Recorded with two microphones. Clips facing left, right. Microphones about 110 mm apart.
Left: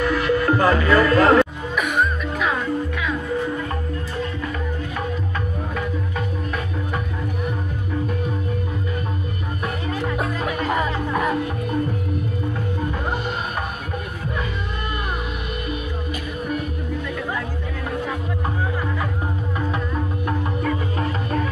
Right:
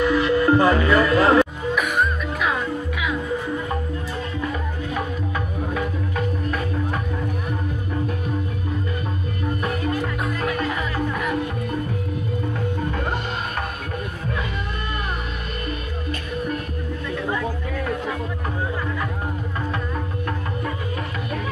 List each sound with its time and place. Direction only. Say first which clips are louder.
0.0 s music: right 1 dB; 20° right (ahead or behind)
1.4 s music: even; centre (ahead or behind)
10.7 s music: left 3 dB; 35° left (ahead or behind)